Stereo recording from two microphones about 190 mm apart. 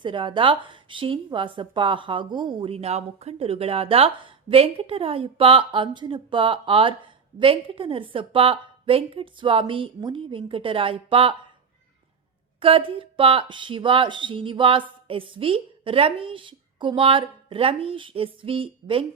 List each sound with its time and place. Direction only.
0.0 s a woman's voice: 25° right (ahead or behind)
12.5 s a woman's voice: 30° right (ahead or behind)